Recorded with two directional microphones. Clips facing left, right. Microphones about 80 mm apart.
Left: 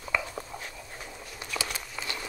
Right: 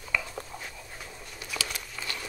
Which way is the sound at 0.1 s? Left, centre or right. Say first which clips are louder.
Left 1 dB; left.